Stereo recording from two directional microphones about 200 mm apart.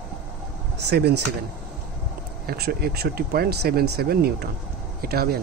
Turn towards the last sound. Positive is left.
turn(degrees=-50)  # may be behind; listen again after turning